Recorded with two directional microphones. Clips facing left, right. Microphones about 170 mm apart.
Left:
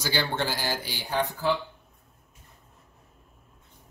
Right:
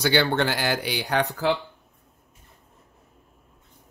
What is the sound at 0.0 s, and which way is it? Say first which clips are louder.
Speech: right 7 dB; 65° right (ahead or behind).